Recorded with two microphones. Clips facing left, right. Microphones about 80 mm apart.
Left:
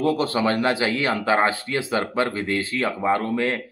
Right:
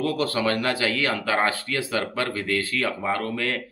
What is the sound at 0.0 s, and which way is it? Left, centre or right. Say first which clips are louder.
A man's voice: left 3 dB; left.